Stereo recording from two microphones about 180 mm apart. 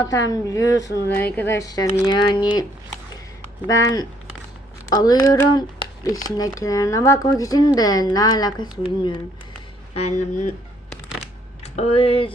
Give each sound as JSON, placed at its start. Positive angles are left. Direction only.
{"t": 0.0, "sound": "speech", "side_deg": 15}
{"t": 3.7, "sound": "speech", "side_deg": 20}
{"t": 9.9, "sound": "speech", "side_deg": 40}
{"t": 11.6, "sound": "speech", "side_deg": 35}